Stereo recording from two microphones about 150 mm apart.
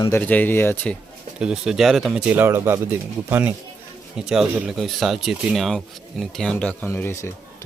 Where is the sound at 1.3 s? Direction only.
5° right (ahead or behind).